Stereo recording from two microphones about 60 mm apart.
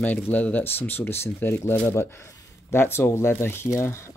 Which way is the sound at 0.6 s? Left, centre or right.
Left.